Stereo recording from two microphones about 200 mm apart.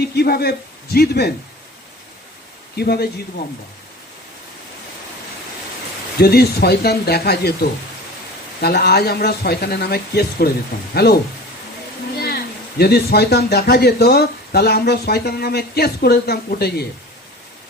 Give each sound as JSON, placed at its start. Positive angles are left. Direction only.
{"t": 0.2, "sound": "speech", "side_deg": 50}
{"t": 2.7, "sound": "speech", "side_deg": 50}
{"t": 6.1, "sound": "speech", "side_deg": 50}
{"t": 12.1, "sound": "a sound", "side_deg": 50}
{"t": 12.8, "sound": "speech", "side_deg": 50}